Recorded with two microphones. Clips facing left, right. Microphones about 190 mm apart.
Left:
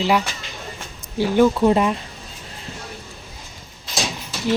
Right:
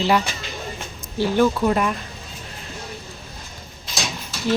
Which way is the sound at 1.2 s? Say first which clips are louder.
Left 3 dB; 15° left (ahead or behind).